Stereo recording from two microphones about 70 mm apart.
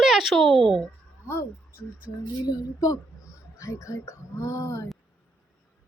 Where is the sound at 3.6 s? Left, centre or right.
Left.